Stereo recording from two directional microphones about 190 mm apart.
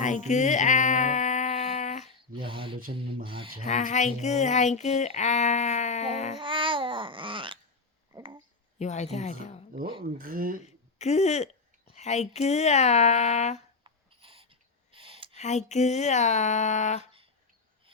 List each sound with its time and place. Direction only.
0.0 s a sound: 40° left (ahead or behind)
2.3 s rub: 25° right (ahead or behind)
3.6 s speech: 40° left (ahead or behind)
6.4 s babbling: 25° right (ahead or behind)
8.1 s a sound: 25° right (ahead or behind)
8.8 s speech: 35° left (ahead or behind)
10.0 s speech: 50° right (ahead or behind)
10.6 s speech: 35° left (ahead or behind)
13.8 s a sound: 30° right (ahead or behind)
15.4 s speech: 35° left (ahead or behind)